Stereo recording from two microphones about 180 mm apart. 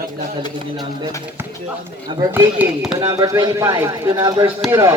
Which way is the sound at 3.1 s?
20° right (ahead or behind).